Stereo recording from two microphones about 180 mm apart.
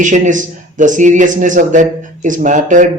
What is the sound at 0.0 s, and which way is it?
A man's voice, 45° right (ahead or behind).